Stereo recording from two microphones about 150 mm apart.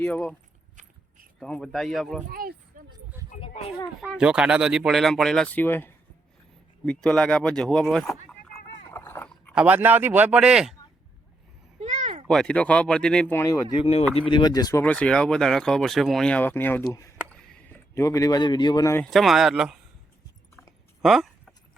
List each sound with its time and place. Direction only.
0.0 s speech: 5° left (ahead or behind)
0.8 s keys jangling: 55° right (ahead or behind)
1.4 s speech: 5° left (ahead or behind)
2.2 s speech: 70° right (ahead or behind)
4.2 s speech: 5° right (ahead or behind)
8.9 s dog: 15° left (ahead or behind)
9.6 s speech: 10° right (ahead or behind)
11.8 s a sound: 55° right (ahead or behind)
12.3 s speech: 5° left (ahead or behind); by 13.7 s 20° left (ahead or behind)
13.7 s speech: 45° left (ahead or behind)
14.2 s speech: 35° left (ahead or behind)
14.8 s speech: 10° left (ahead or behind)
19.1 s speech: centre (ahead or behind)
21.0 s speech: centre (ahead or behind)